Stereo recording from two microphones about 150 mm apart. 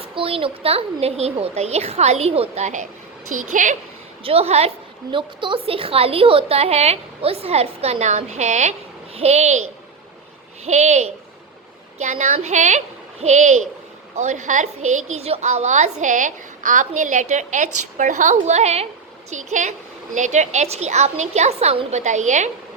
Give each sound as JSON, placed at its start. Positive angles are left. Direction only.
{"t": 0.2, "sound": "a woman's voice", "side_deg": -35}
{"t": 4.2, "sound": "a woman's voice", "side_deg": -40}
{"t": 10.7, "sound": "a woman's voice", "side_deg": -50}